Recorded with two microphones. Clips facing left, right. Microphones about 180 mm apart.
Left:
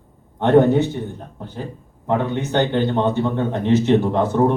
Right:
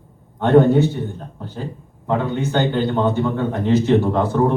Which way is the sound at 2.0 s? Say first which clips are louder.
Even; 20° left (ahead or behind).